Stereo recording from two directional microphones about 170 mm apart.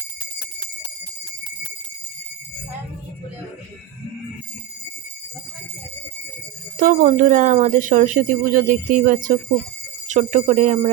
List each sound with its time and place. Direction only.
6.7 s speech: 50° right (ahead or behind)